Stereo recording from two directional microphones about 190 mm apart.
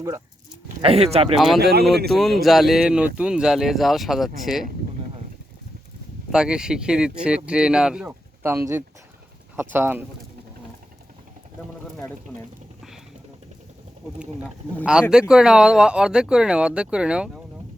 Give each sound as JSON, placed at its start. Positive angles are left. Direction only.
{"t": 0.8, "sound": "speech", "side_deg": -30}
{"t": 1.5, "sound": "speech", "side_deg": -55}
{"t": 2.0, "sound": "speech", "side_deg": 0}
{"t": 6.3, "sound": "speech", "side_deg": -5}
{"t": 14.2, "sound": "speech", "side_deg": 0}